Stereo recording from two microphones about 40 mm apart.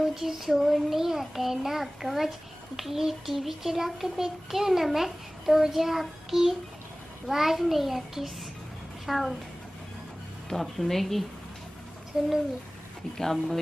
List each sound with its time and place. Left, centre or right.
0.0 s a child's voice: centre
10.5 s speech: centre
13.2 s speech: centre